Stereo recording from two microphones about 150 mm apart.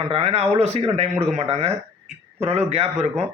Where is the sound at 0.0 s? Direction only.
45° right (ahead or behind).